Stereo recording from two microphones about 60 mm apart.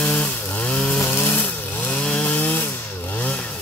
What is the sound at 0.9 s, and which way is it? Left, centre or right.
Chainsaw, left.